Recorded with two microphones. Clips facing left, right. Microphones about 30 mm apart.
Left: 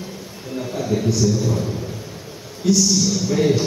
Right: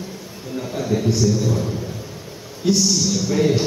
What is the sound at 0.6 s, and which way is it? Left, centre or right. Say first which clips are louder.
Speech: even; centre.